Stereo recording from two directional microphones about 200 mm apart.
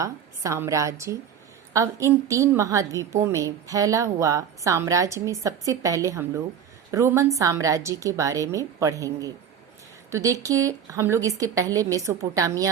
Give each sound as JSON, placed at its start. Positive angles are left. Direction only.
{"t": 0.0, "sound": "a woman's voice", "side_deg": -15}